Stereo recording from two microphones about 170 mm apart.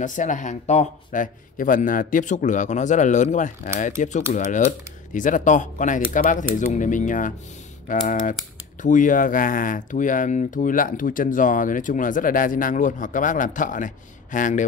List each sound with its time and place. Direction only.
0.0 s speech: 50° left (ahead or behind)